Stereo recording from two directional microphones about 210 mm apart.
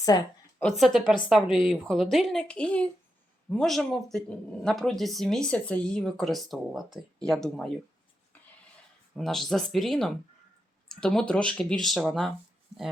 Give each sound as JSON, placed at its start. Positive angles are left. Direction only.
{"t": 0.1, "sound": "a woman's voice", "side_deg": 20}
{"t": 0.6, "sound": "speech", "side_deg": 0}
{"t": 9.1, "sound": "speech", "side_deg": 0}